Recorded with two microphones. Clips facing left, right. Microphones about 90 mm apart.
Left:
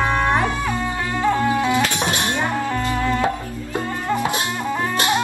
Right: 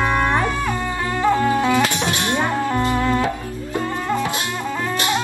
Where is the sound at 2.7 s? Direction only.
20° right (ahead or behind).